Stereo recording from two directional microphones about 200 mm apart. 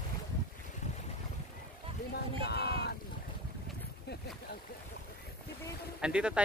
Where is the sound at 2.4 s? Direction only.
55° left (ahead or behind).